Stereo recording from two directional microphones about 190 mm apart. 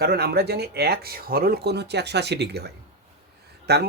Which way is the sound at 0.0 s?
55° right (ahead or behind).